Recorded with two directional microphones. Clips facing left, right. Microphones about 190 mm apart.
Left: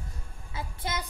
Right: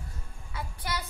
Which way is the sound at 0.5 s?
25° left (ahead or behind).